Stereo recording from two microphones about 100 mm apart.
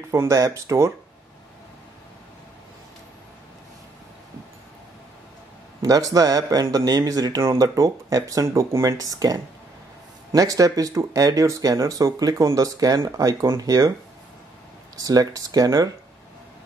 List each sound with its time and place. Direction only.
0.1 s speech: 30° right (ahead or behind)
5.8 s speech: 35° right (ahead or behind)
15.0 s speech: 35° right (ahead or behind)